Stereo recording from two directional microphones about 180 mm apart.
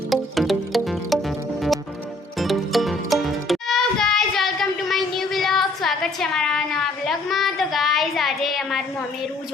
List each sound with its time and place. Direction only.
0.1 s music: centre (ahead or behind)
2.4 s music: centre (ahead or behind)